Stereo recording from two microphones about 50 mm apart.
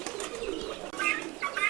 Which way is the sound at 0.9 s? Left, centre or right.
Centre.